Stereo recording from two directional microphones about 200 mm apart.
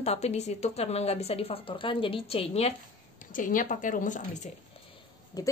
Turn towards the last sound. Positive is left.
turn(degrees=20)  # may be behind; listen again after turning